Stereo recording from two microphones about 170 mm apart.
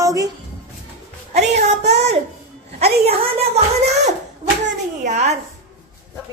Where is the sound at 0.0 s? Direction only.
20° right (ahead or behind).